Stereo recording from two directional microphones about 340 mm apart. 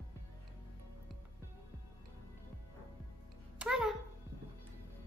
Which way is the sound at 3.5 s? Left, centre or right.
Centre.